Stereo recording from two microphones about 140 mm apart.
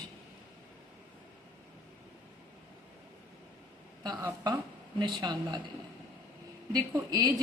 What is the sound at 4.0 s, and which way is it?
A woman's voice, 30° right (ahead or behind).